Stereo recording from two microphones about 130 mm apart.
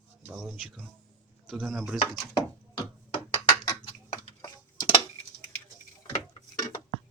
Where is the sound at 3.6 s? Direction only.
30° left (ahead or behind).